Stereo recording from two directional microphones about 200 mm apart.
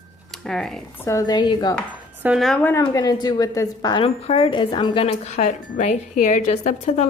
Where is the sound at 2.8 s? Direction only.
20° left (ahead or behind).